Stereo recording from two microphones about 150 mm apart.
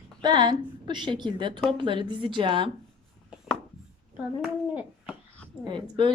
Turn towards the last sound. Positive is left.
turn(degrees=-30)  # may be behind; listen again after turning